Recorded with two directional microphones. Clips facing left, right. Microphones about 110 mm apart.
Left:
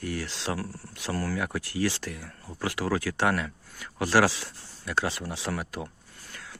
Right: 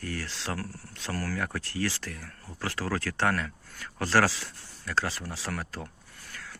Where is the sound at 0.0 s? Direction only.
20° left (ahead or behind).